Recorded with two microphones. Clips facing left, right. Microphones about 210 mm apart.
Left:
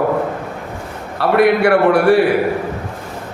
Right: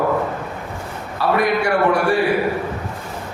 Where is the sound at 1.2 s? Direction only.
65° left (ahead or behind).